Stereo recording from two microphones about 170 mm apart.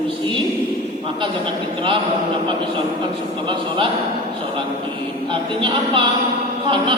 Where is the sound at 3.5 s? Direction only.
30° right (ahead or behind).